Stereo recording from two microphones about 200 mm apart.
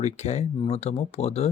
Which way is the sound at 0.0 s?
35° left (ahead or behind).